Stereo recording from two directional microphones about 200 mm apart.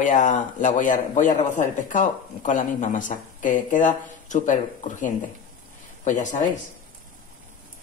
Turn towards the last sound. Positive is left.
turn(degrees=40)  # may be behind; listen again after turning